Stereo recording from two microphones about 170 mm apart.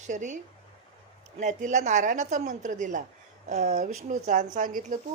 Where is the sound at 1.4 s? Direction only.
45° right (ahead or behind).